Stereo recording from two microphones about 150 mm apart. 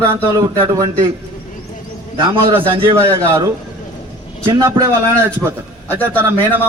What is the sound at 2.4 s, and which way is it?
Speech, 35° right (ahead or behind).